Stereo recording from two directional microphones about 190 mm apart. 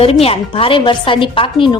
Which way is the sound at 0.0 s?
30° left (ahead or behind).